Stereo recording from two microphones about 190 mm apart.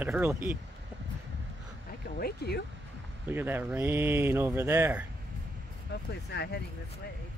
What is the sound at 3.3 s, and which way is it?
Speech, 10° right (ahead or behind).